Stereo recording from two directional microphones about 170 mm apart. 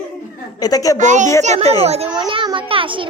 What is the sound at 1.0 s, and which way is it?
A child's voice, 45° right (ahead or behind).